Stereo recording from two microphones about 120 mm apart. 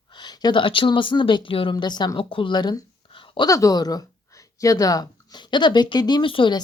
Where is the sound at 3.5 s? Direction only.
30° left (ahead or behind); by 6.6 s 45° left (ahead or behind).